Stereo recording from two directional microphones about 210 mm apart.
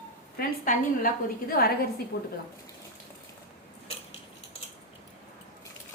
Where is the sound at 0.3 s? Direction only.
40° left (ahead or behind).